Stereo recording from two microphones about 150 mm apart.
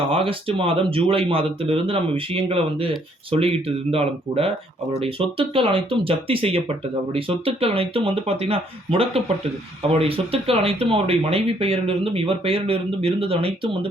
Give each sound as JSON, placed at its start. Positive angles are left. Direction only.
{"t": 0.1, "sound": "speech", "side_deg": -40}